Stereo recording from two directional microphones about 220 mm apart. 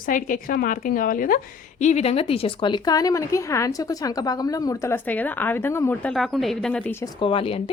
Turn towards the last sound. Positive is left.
turn(degrees=25)  # may be behind; listen again after turning